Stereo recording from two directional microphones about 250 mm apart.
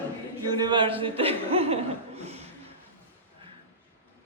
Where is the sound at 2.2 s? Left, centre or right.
Right.